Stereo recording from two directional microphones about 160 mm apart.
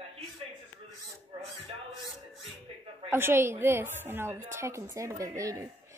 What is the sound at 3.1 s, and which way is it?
A woman's voice, 15° right (ahead or behind).